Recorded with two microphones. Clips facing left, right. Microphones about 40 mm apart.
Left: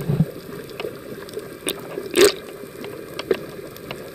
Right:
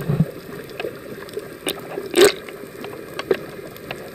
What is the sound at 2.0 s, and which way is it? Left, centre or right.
Biting, right.